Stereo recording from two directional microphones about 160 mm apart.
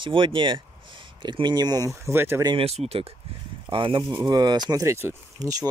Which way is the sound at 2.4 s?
35° right (ahead or behind).